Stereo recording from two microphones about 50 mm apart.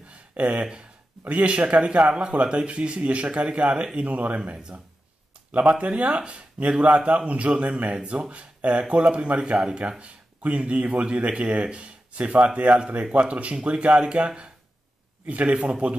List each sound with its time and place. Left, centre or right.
0.1 s a sound: right
1.2 s speech: right
5.8 s speech: right
15.5 s a man's voice: centre